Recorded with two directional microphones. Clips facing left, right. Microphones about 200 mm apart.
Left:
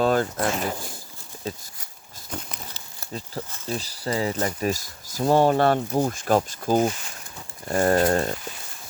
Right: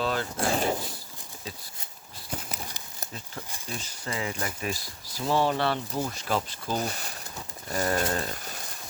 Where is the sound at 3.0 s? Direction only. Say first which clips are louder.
Left 7 dB; 15° right (ahead or behind).